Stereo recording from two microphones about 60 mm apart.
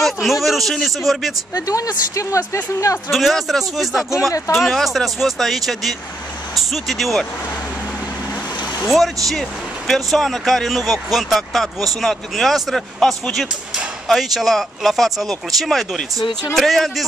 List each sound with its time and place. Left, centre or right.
0.0 s speech: centre
1.5 s speech: left
3.1 s speech: centre
8.8 s speech: centre